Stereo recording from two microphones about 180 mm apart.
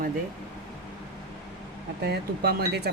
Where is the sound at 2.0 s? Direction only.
60° right (ahead or behind).